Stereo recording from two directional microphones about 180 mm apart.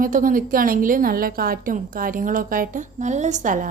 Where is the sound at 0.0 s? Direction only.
50° right (ahead or behind).